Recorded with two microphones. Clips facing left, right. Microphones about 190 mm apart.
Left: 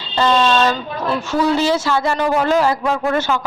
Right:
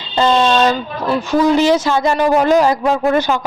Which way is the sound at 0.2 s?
20° right (ahead or behind).